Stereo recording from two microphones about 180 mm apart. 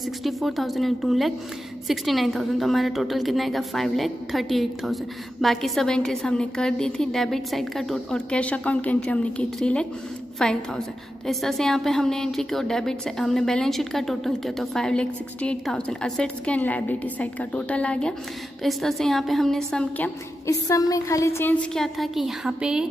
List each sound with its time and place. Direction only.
0.2 s a woman's voice: centre (ahead or behind)
20.4 s a woman's voice: 20° left (ahead or behind); by 22.8 s 5° right (ahead or behind)